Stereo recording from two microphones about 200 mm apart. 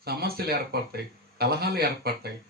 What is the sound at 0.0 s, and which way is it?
Speech, 50° right (ahead or behind).